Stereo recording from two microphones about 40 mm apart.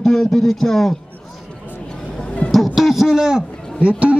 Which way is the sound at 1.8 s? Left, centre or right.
Centre.